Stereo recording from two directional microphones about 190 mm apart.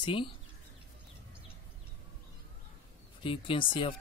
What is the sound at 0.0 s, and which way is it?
Speech, 25° left (ahead or behind).